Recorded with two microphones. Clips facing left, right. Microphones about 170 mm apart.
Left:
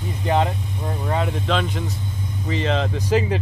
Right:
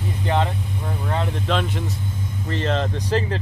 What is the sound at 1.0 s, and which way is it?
Speech, 10° left (ahead or behind).